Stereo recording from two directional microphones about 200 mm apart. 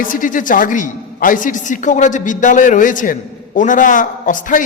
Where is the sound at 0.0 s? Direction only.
40° left (ahead or behind).